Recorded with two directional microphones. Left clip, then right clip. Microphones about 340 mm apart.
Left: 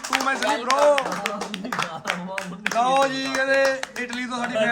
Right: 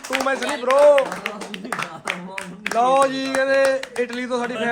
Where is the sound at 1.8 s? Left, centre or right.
Left.